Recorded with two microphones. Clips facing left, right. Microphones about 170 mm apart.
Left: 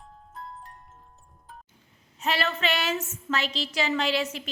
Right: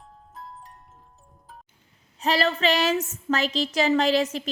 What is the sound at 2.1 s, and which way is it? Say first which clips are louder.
A woman's voice: right 5 dB; 35° right (ahead or behind).